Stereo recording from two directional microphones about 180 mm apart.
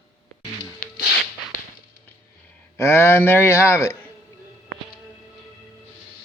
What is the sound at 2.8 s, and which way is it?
Speech, 15° left (ahead or behind).